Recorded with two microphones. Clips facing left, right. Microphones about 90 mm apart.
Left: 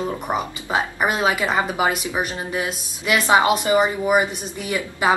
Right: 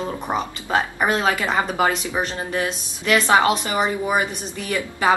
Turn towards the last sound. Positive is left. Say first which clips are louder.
# even
turn(degrees=15)  # may be behind; listen again after turning